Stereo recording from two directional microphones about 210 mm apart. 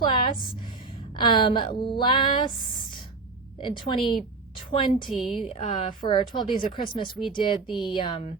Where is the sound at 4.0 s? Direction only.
Centre (ahead or behind).